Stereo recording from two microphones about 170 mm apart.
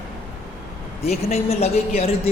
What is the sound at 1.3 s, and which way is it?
A woman's voice, 40° left (ahead or behind).